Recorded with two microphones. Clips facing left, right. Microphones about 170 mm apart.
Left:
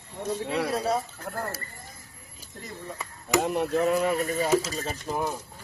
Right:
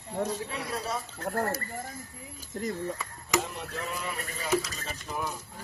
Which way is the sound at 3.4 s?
55° left (ahead or behind).